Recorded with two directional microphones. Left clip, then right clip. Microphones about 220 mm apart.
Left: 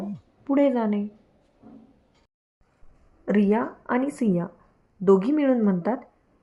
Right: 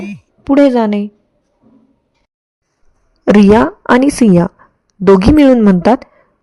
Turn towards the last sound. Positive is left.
turn(degrees=-50)  # may be behind; listen again after turning